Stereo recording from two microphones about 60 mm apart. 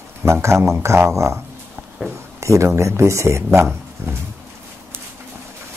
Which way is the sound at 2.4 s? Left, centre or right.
Right.